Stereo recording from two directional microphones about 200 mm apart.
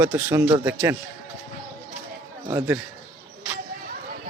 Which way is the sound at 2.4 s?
10° right (ahead or behind).